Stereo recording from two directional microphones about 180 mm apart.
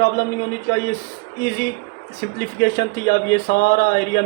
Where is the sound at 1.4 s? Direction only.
55° left (ahead or behind).